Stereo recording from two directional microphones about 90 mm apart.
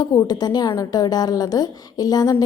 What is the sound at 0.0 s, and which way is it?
A woman's voice, 45° left (ahead or behind).